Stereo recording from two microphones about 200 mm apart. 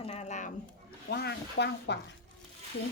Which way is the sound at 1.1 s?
55° left (ahead or behind).